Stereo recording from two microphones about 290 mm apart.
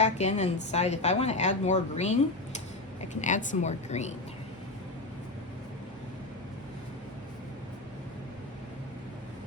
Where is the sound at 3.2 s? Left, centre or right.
Left.